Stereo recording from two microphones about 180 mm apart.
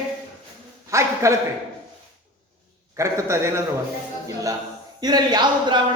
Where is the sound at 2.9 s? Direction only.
15° right (ahead or behind).